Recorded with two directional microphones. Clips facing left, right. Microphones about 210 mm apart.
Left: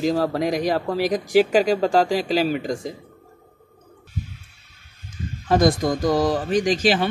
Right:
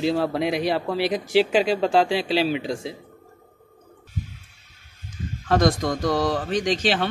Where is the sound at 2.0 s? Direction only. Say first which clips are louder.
Left 1 dB; 45° left (ahead or behind).